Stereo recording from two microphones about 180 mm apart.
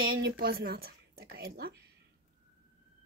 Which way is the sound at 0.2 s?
55° right (ahead or behind).